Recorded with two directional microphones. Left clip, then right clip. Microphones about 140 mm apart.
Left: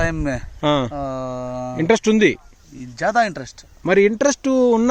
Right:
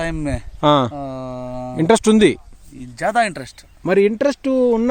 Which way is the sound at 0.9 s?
5° left (ahead or behind).